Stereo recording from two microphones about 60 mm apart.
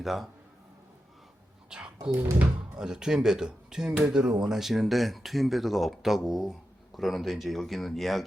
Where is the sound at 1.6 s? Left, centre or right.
Centre.